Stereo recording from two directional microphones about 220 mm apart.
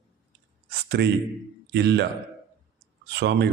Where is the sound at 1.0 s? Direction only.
50° right (ahead or behind).